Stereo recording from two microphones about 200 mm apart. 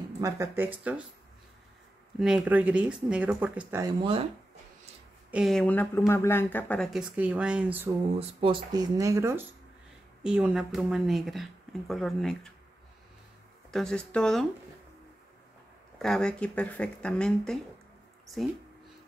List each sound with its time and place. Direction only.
0.2 s speech: 10° right (ahead or behind)
2.1 s speech: 5° right (ahead or behind)
3.8 s speech: 25° right (ahead or behind)
5.3 s speech: centre (ahead or behind)
8.2 s speech: 25° right (ahead or behind); by 12.5 s 5° left (ahead or behind)
13.7 s speech: centre (ahead or behind)
16.0 s speech: 5° left (ahead or behind)